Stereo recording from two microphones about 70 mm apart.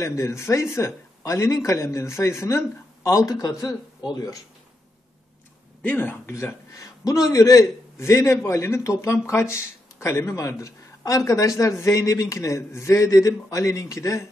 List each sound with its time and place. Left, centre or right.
0.0 s a man's voice: left
5.8 s speech: left
6.3 s a man's voice: left